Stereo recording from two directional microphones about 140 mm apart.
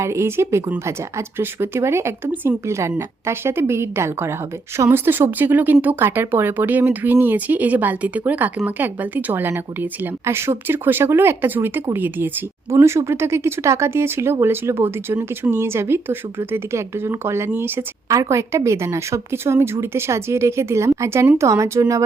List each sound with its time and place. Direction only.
0.0 s speech: 20° right (ahead or behind)